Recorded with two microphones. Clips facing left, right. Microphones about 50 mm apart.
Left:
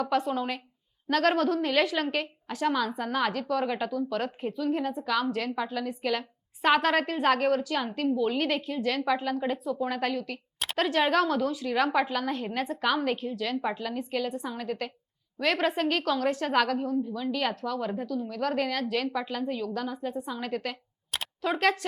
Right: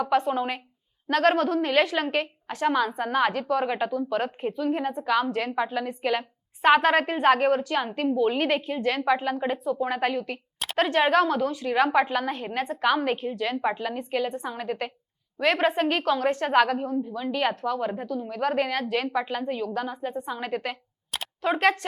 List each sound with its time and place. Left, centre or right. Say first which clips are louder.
0.0 s a woman's voice: right 4 dB; centre